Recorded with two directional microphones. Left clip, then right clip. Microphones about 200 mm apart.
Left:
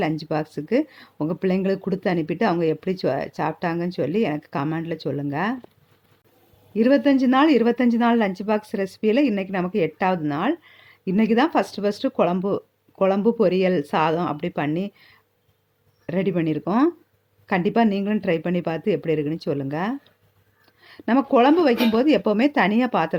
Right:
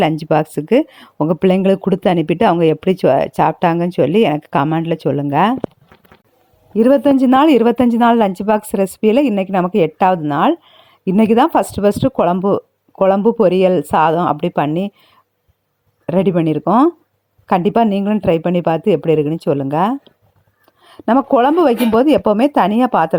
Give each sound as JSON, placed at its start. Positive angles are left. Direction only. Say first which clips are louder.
{"t": 0.0, "sound": "speech", "louder": "right 10 dB", "side_deg": -40}
{"t": 6.7, "sound": "speech", "louder": "right 7 dB", "side_deg": -30}